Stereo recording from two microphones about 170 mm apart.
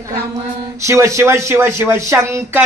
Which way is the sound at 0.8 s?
15° right (ahead or behind).